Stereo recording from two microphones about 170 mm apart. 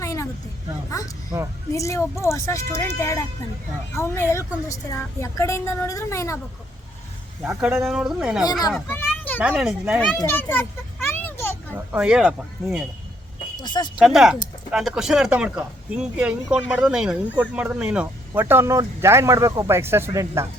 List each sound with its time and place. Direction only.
0.0 s a sound: 15° left (ahead or behind)
0.9 s a woman's voice: 20° left (ahead or behind)
7.4 s speech: 10° right (ahead or behind)
8.9 s children playing: 10° left (ahead or behind)
9.4 s speech: 5° right (ahead or behind)
10.2 s children playing: 10° left (ahead or behind)
11.7 s speech: 10° right (ahead or behind)
13.6 s speech: 25° left (ahead or behind)
14.0 s speech: centre (ahead or behind)